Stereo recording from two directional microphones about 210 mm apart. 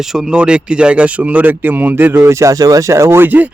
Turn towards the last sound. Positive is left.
turn(degrees=-10)  # may be behind; listen again after turning